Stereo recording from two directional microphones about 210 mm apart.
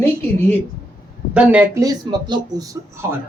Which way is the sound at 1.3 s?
5° right (ahead or behind).